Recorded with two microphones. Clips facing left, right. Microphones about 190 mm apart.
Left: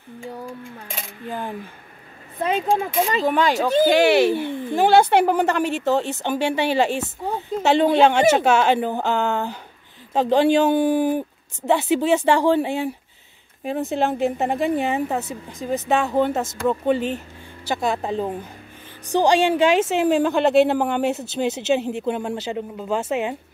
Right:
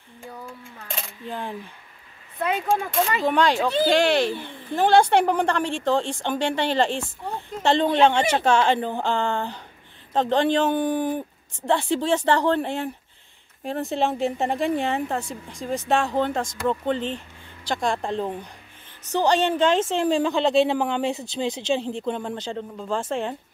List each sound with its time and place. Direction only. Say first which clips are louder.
2.5 s speech: left 3 dB; 25° left (ahead or behind)
3.3 s a woman's voice: even; centre (ahead or behind)